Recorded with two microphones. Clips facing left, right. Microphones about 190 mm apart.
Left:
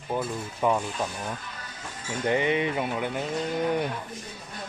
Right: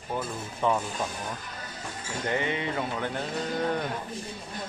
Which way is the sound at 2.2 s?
20° left (ahead or behind).